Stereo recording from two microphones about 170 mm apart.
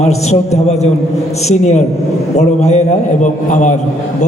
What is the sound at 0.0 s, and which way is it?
A man's voice, 40° left (ahead or behind).